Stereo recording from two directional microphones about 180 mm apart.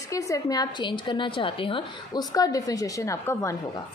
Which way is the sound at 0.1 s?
20° left (ahead or behind).